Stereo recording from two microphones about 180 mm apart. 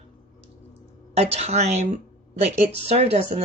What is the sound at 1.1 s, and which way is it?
Speech, 35° right (ahead or behind).